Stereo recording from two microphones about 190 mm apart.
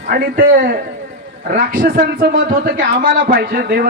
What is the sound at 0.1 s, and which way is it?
A man's voice, 50° right (ahead or behind).